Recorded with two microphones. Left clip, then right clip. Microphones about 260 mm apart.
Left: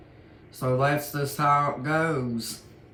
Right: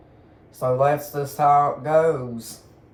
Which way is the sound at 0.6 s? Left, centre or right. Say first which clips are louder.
Right 5 dB; left.